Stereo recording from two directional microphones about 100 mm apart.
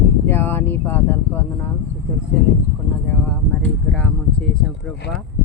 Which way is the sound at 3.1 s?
15° left (ahead or behind).